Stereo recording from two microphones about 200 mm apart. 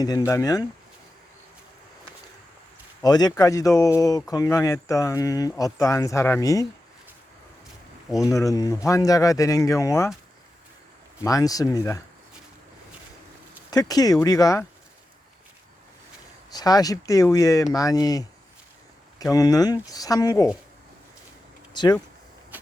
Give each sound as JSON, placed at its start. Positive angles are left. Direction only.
{"t": 0.0, "sound": "speech", "side_deg": 15}
{"t": 3.0, "sound": "speech", "side_deg": 20}
{"t": 8.1, "sound": "speech", "side_deg": 15}
{"t": 11.2, "sound": "speech", "side_deg": 15}
{"t": 13.7, "sound": "speech", "side_deg": 20}
{"t": 16.5, "sound": "speech", "side_deg": 20}
{"t": 21.7, "sound": "speech", "side_deg": 20}
{"t": 22.5, "sound": "train", "side_deg": -10}